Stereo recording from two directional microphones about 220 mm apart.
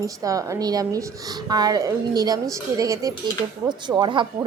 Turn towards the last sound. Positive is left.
turn(degrees=-20)  # may be behind; listen again after turning